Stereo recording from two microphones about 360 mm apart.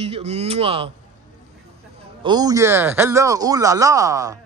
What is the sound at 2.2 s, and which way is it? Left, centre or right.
Speech, centre.